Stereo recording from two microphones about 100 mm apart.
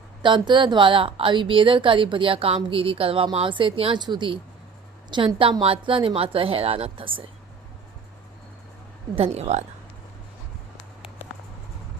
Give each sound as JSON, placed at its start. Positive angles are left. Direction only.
{"t": 0.2, "sound": "a woman's voice", "side_deg": -50}
{"t": 3.9, "sound": "a woman's voice", "side_deg": -50}
{"t": 9.1, "sound": "speech", "side_deg": -85}